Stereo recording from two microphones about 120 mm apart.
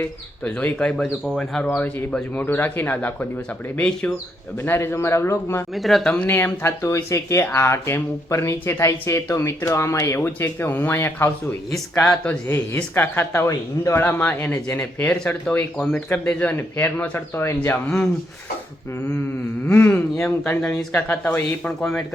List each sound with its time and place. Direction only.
0.0 s speech: 15° left (ahead or behind)
5.7 s speech: centre (ahead or behind)
6.1 s speech: 15° left (ahead or behind)
11.7 s speech: 5° left (ahead or behind)
12.5 s speech: 20° left (ahead or behind)
19.6 s speech: 15° left (ahead or behind)